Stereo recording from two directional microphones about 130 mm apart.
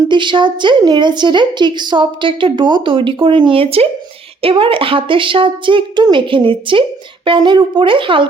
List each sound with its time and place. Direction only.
0.1 s a woman's voice: 35° right (ahead or behind)